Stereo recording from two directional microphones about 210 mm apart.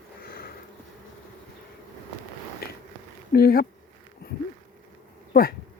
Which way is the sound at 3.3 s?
45° left (ahead or behind).